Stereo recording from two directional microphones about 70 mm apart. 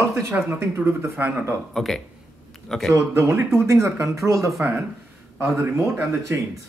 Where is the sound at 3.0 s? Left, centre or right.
Right.